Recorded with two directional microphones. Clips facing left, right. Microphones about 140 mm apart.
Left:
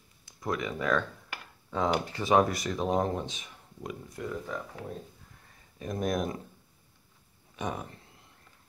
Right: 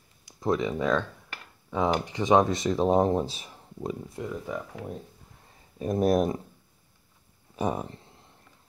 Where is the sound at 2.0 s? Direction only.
15° right (ahead or behind).